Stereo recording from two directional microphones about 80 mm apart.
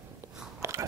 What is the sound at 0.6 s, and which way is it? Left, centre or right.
Biting, right.